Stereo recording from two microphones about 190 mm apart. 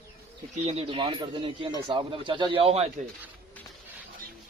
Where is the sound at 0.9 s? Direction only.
25° right (ahead or behind).